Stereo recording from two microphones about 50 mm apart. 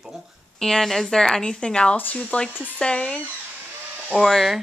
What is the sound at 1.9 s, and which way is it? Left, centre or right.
Speech, left.